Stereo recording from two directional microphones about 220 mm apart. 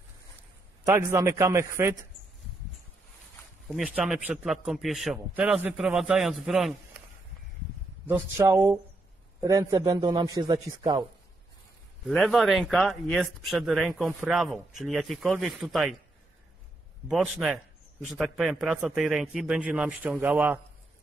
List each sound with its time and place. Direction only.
0.4 s a man's voice: 10° right (ahead or behind)
3.6 s speech: 5° right (ahead or behind)
8.1 s a man's voice: 10° right (ahead or behind)
12.1 s speech: centre (ahead or behind)
17.1 s speech: centre (ahead or behind)